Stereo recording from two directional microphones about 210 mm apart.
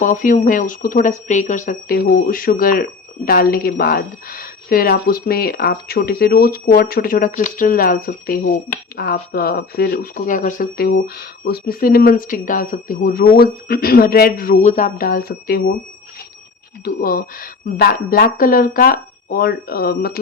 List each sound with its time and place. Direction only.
0.0 s speech: 40° left (ahead or behind)
16.8 s speech: 45° left (ahead or behind)